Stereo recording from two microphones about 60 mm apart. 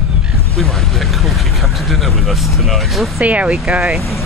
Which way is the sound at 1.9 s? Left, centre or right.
Centre.